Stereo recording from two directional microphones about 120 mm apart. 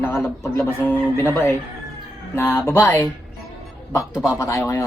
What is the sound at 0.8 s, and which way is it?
Speech, 20° left (ahead or behind).